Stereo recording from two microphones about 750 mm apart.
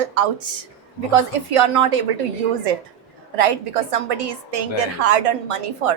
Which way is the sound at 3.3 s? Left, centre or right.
Right.